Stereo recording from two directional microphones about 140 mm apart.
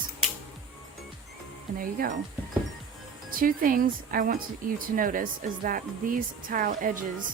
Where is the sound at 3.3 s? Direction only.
90° right.